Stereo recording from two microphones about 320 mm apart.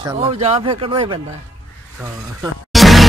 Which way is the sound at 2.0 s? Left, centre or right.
Centre.